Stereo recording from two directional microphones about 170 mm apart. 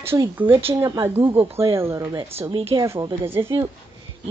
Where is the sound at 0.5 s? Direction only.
30° right (ahead or behind).